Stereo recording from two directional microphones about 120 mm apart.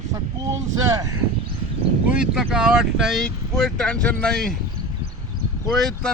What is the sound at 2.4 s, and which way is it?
Speech, 5° right (ahead or behind).